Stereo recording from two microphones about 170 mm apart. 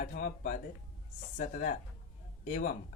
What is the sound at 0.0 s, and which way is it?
Speech, 60° left (ahead or behind).